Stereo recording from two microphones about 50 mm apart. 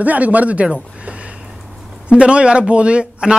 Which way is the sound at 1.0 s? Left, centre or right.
Right.